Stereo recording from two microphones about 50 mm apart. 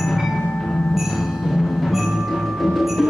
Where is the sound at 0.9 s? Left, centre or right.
Centre.